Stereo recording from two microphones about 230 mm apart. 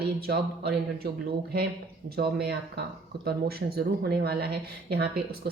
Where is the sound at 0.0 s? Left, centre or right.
Right.